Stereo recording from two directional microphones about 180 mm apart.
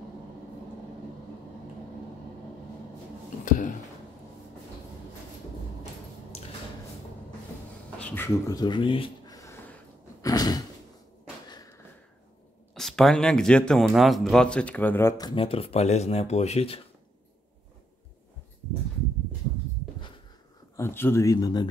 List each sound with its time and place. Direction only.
3.4 s speech: 50° left (ahead or behind)
8.0 s speech: 10° left (ahead or behind); by 9.4 s 30° left (ahead or behind)
9.4 s a sound: 15° left (ahead or behind)
10.2 s sigh: 20° left (ahead or behind)
11.4 s a sound: 20° left (ahead or behind)
12.7 s speech: centre (ahead or behind); by 16.8 s 35° left (ahead or behind)
20.7 s speech: 15° left (ahead or behind)